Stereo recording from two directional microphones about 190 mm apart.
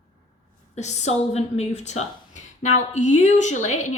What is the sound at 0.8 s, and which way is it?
A woman's voice, 35° left (ahead or behind).